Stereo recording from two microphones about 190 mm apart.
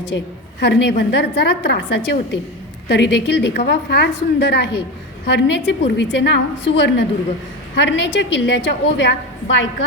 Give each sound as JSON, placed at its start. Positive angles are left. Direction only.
{"t": 0.1, "sound": "a woman's voice", "side_deg": 70}